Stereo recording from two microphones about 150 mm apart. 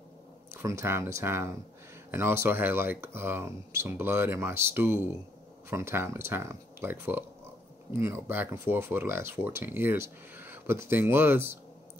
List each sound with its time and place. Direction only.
0.6 s speech: 20° right (ahead or behind)